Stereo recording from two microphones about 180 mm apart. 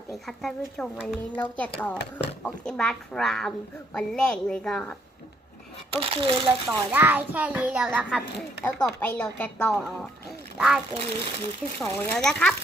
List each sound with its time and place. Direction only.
0.3 s speech: 5° left (ahead or behind)
6.0 s a child's voice: 30° right (ahead or behind)
6.7 s a child's voice: 10° right (ahead or behind)
8.6 s speech: 10° left (ahead or behind)
10.9 s a child's voice: 35° right (ahead or behind)
11.8 s speech: 5° left (ahead or behind)